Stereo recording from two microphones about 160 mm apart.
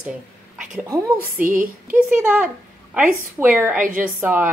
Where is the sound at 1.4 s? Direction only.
60° right (ahead or behind).